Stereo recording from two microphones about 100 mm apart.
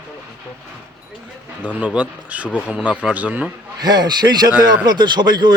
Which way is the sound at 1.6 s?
15° right (ahead or behind).